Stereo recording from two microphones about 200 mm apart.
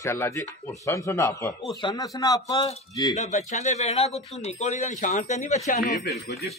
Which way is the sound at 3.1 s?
35° left (ahead or behind).